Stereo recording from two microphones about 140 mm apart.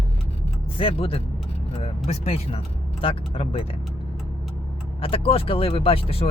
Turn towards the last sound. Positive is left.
turn(degrees=45)  # may be behind; listen again after turning